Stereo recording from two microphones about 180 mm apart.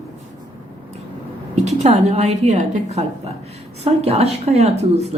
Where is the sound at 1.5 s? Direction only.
40° right (ahead or behind).